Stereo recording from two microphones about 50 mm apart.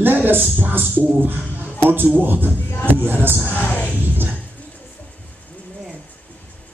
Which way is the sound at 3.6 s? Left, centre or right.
Left.